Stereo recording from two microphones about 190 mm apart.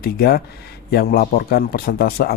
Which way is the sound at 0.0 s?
55° left (ahead or behind).